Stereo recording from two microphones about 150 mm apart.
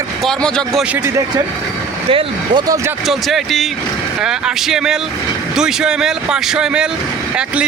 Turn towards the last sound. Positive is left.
turn(degrees=-5)  # may be behind; listen again after turning